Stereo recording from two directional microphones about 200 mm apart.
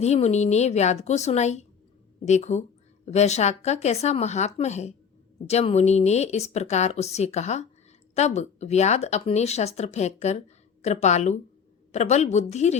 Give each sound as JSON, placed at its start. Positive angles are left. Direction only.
{"t": 0.0, "sound": "speech", "side_deg": 35}